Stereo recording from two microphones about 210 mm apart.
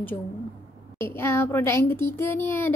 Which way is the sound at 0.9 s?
10° left (ahead or behind).